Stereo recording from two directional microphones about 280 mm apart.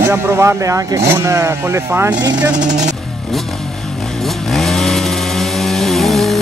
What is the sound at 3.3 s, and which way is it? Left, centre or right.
Motorcycle, centre.